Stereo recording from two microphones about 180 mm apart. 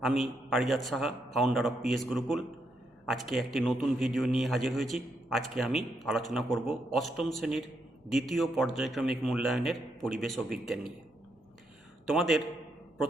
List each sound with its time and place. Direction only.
0.0 s speech: centre (ahead or behind)
12.0 s speech: centre (ahead or behind)